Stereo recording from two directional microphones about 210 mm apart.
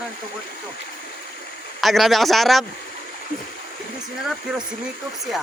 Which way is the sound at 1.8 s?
Centre (ahead or behind).